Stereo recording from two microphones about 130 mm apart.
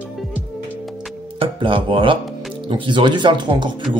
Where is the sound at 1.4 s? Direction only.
40° right (ahead or behind).